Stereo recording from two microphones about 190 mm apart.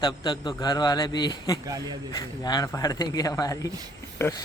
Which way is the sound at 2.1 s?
20° left (ahead or behind).